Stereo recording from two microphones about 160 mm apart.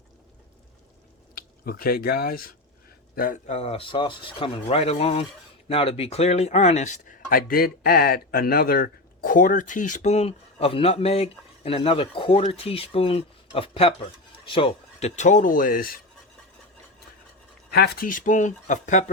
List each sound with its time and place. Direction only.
1.4 s speech: 65° left (ahead or behind)
3.5 s speech: 40° left (ahead or behind); by 16.0 s 60° left (ahead or behind)
17.7 s speech: 85° left; by 19.1 s 50° left (ahead or behind)